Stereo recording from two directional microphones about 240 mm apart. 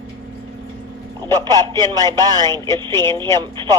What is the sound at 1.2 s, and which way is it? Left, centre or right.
Speech, centre.